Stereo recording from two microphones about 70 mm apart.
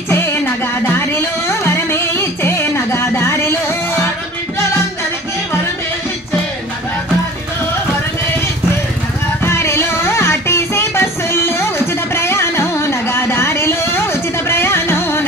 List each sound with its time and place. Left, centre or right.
0.1 s music: left
9.4 s music: left